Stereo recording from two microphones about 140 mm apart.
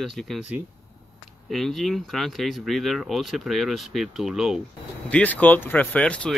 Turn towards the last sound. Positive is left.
turn(degrees=10)  # may be behind; listen again after turning